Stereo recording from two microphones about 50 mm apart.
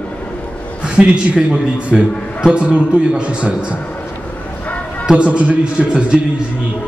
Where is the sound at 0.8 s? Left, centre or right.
Centre.